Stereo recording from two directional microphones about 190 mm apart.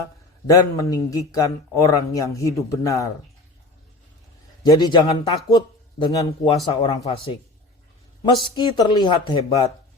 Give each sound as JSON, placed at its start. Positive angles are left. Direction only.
{"t": 0.4, "sound": "a man's voice", "side_deg": 15}
{"t": 4.6, "sound": "speech", "side_deg": 20}